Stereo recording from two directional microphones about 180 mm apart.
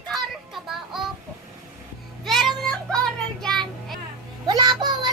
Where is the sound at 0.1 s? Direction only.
Centre (ahead or behind).